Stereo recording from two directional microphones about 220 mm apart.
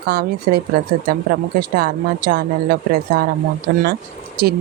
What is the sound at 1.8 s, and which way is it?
Speech, 40° right (ahead or behind).